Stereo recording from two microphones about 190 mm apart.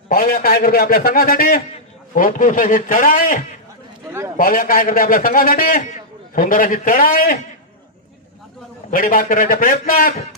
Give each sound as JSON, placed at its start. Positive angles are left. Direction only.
{"t": 0.1, "sound": "a man's voice", "side_deg": 50}
{"t": 4.4, "sound": "a man's voice", "side_deg": 45}
{"t": 8.9, "sound": "a man's voice", "side_deg": 45}